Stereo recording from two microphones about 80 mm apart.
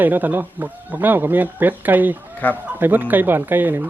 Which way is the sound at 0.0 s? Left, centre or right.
Right.